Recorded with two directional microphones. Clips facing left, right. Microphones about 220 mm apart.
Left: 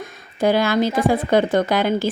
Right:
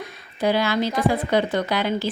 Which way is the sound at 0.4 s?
45° left (ahead or behind).